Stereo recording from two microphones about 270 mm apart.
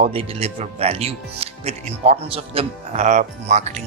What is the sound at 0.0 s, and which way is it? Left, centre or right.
Speech, right.